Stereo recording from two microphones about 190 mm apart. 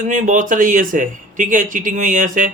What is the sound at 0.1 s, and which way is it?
Speech, 40° right (ahead or behind).